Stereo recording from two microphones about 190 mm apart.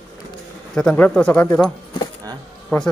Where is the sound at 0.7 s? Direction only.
5° left (ahead or behind).